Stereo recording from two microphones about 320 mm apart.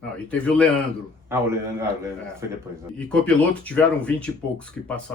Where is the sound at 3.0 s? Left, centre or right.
Centre.